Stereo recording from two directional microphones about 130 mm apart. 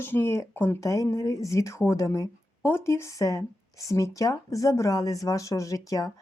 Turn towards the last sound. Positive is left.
turn(degrees=25)  # may be behind; listen again after turning